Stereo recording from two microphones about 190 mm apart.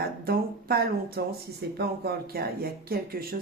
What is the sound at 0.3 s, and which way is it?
Speech, 55° right (ahead or behind).